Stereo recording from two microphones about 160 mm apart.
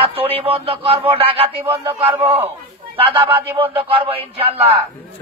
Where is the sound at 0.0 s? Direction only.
35° right (ahead or behind).